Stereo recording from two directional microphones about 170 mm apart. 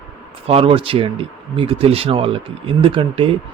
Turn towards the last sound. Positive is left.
turn(degrees=-30)  # may be behind; listen again after turning